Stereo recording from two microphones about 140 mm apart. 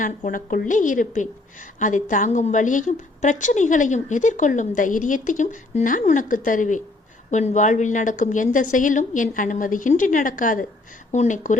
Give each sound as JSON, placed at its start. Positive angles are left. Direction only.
{"t": 0.0, "sound": "a woman's voice", "side_deg": 70}
{"t": 11.1, "sound": "a woman's voice", "side_deg": 60}